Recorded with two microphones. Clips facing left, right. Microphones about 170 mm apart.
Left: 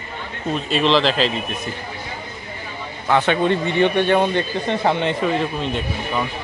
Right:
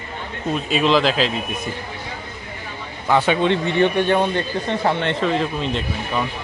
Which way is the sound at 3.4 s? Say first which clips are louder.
Even; 10° left (ahead or behind).